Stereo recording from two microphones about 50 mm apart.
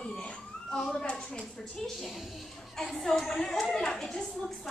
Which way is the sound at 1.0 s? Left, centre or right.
Centre.